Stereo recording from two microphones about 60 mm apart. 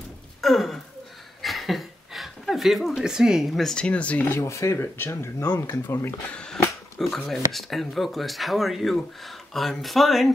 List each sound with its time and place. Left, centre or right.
0.4 s a sound: centre
3.5 s speech: centre
3.8 s speech: left
4.4 s speech: left
4.7 s speech: left
5.1 s speech: left
5.5 s speech: left
6.3 s a sound: centre
7.2 s speech: centre